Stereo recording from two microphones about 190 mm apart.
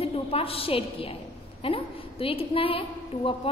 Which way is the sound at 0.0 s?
30° left (ahead or behind).